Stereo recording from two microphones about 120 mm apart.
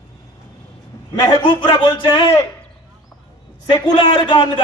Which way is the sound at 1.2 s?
40° left (ahead or behind).